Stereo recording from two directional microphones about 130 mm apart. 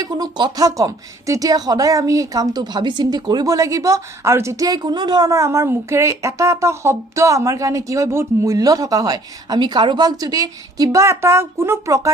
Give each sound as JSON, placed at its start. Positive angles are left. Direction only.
{"t": 0.0, "sound": "speech", "side_deg": -30}